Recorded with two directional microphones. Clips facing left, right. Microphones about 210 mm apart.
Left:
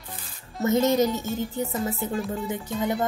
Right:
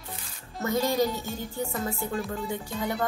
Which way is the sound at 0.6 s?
20° left (ahead or behind).